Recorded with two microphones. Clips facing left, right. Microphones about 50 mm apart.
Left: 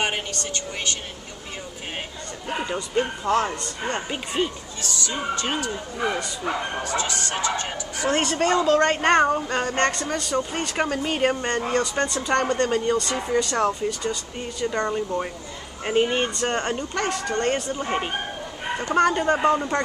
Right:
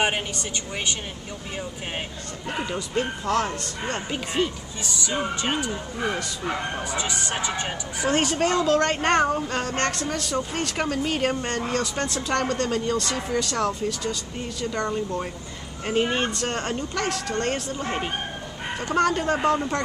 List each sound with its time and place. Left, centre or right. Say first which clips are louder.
0.0 s speech: right 1 dB; centre
3.3 s a woman's voice: left 2 dB; centre
5.0 s speech: right 1 dB; centre
6.8 s speech: left 2 dB; centre
8.1 s speech: left 1 dB; centre
8.5 s a woman's voice: left 3 dB; centre